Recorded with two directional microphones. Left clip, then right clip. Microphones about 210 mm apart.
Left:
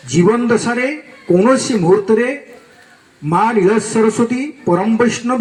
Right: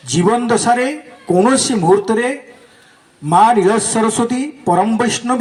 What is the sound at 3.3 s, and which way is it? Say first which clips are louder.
Speech: right 3 dB; 35° right (ahead or behind).